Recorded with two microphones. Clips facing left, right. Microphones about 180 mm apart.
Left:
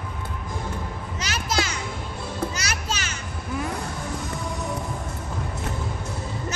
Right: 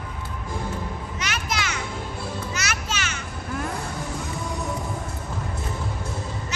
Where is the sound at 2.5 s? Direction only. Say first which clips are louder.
Even; 35° left (ahead or behind).